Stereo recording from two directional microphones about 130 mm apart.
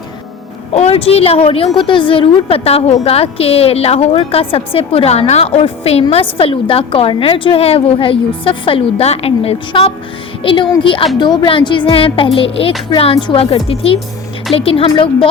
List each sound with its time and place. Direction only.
0.7 s a woman's voice: 50° left (ahead or behind)